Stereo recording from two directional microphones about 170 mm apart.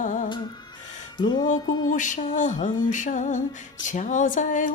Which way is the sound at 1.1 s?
25° left (ahead or behind).